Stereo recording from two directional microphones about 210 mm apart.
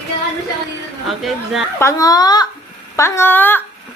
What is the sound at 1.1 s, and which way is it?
Speech, centre (ahead or behind).